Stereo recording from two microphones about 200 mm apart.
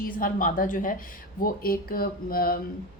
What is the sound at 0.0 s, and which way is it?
Speech, 45° left (ahead or behind).